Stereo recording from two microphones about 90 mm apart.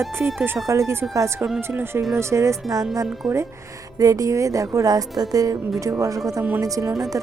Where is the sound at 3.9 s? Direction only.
40° right (ahead or behind).